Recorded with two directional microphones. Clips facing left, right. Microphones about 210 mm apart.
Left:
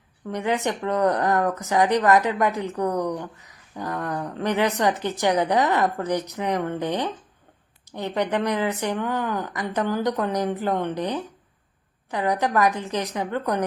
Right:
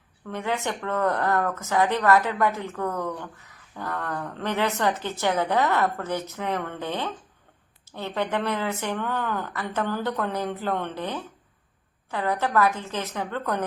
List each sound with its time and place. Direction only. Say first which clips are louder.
0.3 s a woman's voice: left 4 dB; 15° left (ahead or behind)